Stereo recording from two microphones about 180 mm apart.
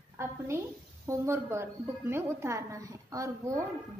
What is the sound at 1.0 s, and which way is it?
A woman's voice, 15° right (ahead or behind).